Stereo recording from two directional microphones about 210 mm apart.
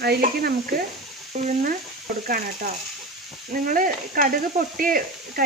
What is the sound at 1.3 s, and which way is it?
Speech, 35° right (ahead or behind).